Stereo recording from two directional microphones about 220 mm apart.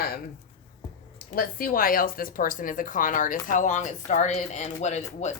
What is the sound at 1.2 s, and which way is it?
A woman's voice, 40° left (ahead or behind).